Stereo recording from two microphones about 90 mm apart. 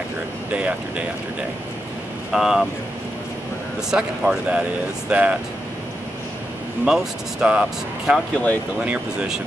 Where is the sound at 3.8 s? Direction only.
10° right (ahead or behind).